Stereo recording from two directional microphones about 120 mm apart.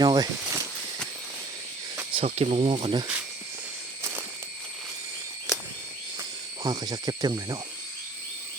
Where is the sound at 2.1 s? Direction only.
50° right (ahead or behind).